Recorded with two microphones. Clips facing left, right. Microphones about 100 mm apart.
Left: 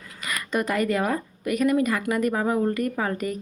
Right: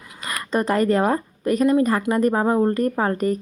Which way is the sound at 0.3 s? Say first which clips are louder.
Right 4 dB; 35° right (ahead or behind).